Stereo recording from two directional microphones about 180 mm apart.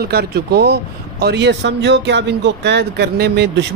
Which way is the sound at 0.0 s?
60° right (ahead or behind).